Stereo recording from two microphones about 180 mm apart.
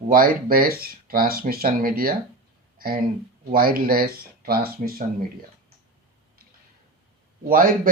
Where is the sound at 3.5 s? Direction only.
55° right (ahead or behind).